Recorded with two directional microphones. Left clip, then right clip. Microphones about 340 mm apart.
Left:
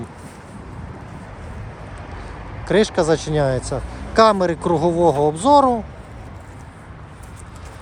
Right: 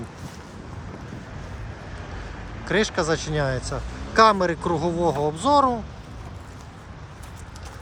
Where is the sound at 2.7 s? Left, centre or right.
Centre.